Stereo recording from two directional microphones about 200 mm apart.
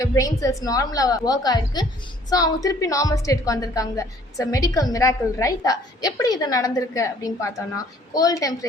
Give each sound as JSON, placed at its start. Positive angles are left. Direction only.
{"t": 0.0, "sound": "a woman's voice", "side_deg": 15}